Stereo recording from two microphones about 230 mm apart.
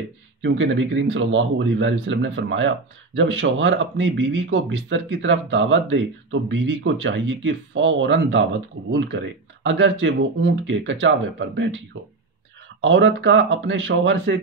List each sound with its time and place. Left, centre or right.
0.4 s speech: right
12.8 s speech: right